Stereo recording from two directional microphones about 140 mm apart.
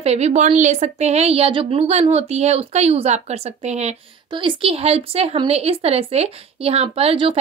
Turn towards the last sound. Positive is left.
turn(degrees=-40)  # may be behind; listen again after turning